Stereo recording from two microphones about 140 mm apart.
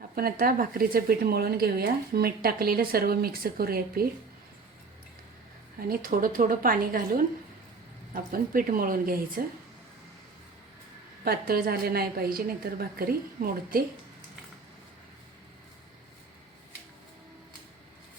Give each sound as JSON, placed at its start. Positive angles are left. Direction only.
{"t": 0.2, "sound": "speech", "side_deg": -85}
{"t": 5.9, "sound": "a woman's voice", "side_deg": -90}
{"t": 8.1, "sound": "speech", "side_deg": -90}
{"t": 11.2, "sound": "speech", "side_deg": -90}